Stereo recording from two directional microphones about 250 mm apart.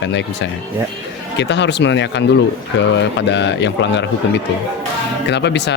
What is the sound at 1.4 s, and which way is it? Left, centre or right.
Speech, left.